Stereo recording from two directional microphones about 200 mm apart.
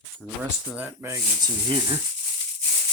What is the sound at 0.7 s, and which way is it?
Speech, 10° right (ahead or behind).